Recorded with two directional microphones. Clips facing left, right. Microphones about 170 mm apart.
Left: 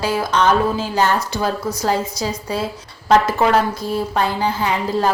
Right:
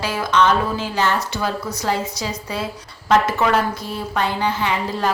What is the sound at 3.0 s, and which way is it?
Speech, 35° left (ahead or behind).